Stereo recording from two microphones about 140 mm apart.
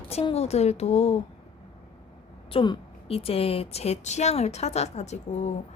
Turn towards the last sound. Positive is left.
turn(degrees=55)  # may be behind; listen again after turning